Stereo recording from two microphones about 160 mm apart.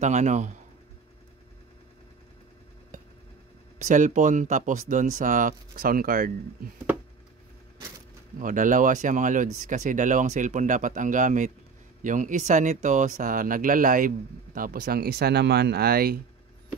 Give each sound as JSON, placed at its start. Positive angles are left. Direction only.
{"t": 0.0, "sound": "speech", "side_deg": -50}
{"t": 3.8, "sound": "speech", "side_deg": -50}
{"t": 8.4, "sound": "speech", "side_deg": -55}